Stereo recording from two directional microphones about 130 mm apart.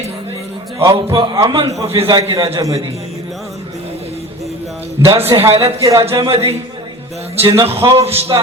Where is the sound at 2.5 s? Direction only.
25° right (ahead or behind).